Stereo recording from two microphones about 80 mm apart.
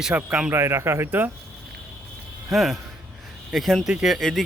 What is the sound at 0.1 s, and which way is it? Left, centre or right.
Speech, centre.